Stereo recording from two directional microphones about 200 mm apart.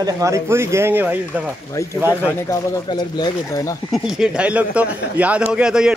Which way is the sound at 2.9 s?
20° left (ahead or behind).